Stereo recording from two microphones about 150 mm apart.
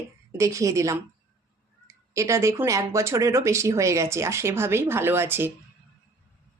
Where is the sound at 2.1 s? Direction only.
20° right (ahead or behind).